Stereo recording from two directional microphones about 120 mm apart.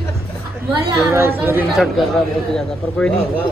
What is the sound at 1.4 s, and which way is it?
Speech, 20° right (ahead or behind).